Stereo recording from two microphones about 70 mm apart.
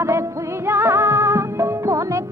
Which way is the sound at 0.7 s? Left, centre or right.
Right.